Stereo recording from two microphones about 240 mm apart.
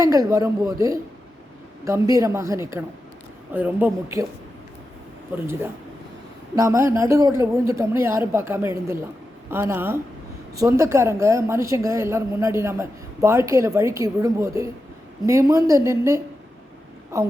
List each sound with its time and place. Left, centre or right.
0.0 s a woman's voice: centre
6.6 s a woman's voice: centre